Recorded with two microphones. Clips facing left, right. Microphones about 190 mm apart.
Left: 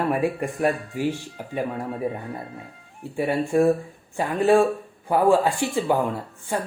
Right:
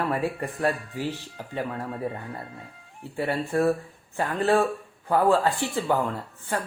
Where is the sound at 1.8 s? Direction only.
Centre (ahead or behind).